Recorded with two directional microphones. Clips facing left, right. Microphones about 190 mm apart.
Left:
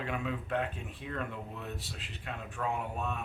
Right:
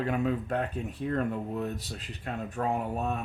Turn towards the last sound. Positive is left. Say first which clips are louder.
# right 5 dB
turn(degrees=-40)  # may be behind; listen again after turning